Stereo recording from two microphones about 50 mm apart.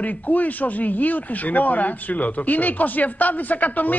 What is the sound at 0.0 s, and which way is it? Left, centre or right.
Speech, left.